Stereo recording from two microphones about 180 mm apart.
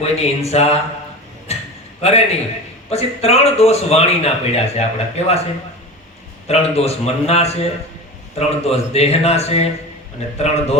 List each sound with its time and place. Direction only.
0.0 s speech: 35° left (ahead or behind)
1.5 s a sound: 35° left (ahead or behind)
2.0 s a man's voice: 35° left (ahead or behind)
6.5 s speech: 35° left (ahead or behind)